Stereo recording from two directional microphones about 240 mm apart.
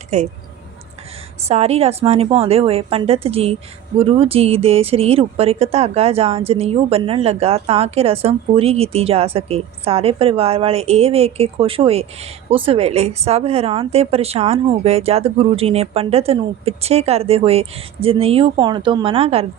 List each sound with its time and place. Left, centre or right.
0.1 s a woman's voice: right
1.5 s a woman's voice: right